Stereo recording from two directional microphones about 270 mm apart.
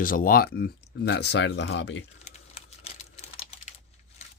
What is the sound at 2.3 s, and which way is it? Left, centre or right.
Typing, left.